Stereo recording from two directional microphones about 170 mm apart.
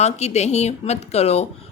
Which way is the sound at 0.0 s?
40° left (ahead or behind).